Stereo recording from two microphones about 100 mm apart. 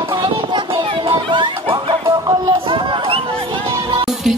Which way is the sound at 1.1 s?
55° right (ahead or behind).